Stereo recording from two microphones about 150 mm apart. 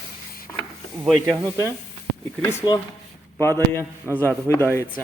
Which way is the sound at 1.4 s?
15° left (ahead or behind).